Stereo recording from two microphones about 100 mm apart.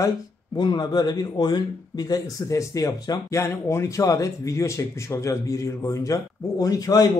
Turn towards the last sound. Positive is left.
turn(degrees=40)  # may be behind; listen again after turning